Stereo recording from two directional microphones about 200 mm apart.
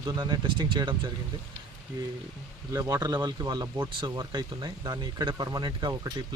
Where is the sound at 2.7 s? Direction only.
15° right (ahead or behind).